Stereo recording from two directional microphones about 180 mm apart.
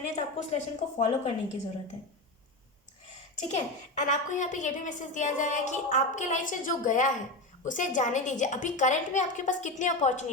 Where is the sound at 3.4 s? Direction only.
40° left (ahead or behind).